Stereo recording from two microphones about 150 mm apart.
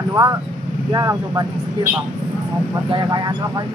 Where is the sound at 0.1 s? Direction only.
20° right (ahead or behind).